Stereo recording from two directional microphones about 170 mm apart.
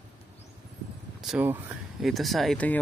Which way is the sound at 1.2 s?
Centre (ahead or behind).